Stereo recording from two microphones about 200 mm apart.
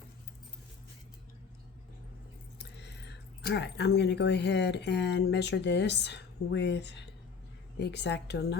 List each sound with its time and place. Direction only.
2.6 s a woman's voice: 60° left (ahead or behind)